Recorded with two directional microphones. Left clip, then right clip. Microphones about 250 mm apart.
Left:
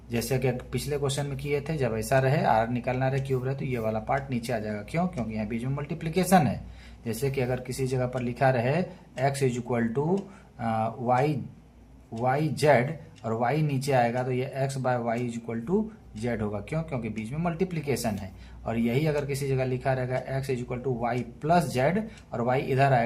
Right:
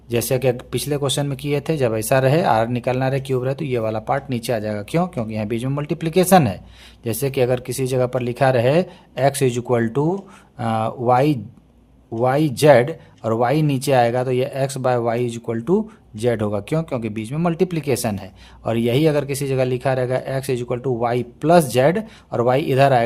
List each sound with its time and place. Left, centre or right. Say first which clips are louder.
0.1 s speech: right 9 dB; right